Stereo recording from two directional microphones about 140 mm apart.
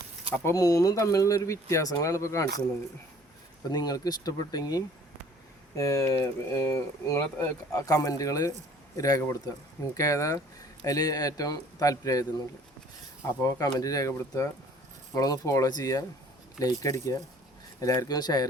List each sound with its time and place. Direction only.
0.4 s speech: 25° left (ahead or behind)
3.7 s speech: 25° left (ahead or behind)
13.2 s speech: 25° left (ahead or behind)